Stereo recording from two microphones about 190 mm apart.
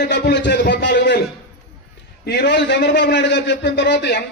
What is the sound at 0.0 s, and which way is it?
A man's voice, 65° left (ahead or behind).